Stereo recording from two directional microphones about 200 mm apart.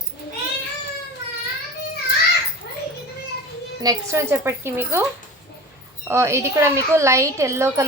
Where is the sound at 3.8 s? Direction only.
15° right (ahead or behind).